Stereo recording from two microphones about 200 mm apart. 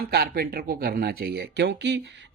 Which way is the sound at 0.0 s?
50° right (ahead or behind).